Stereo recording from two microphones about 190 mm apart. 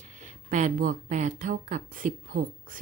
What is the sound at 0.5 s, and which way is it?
Speech, 45° right (ahead or behind).